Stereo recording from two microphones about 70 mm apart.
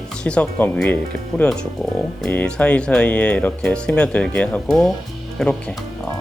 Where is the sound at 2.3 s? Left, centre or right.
Left.